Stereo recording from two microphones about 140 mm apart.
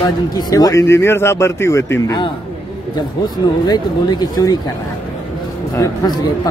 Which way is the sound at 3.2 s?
30° left (ahead or behind).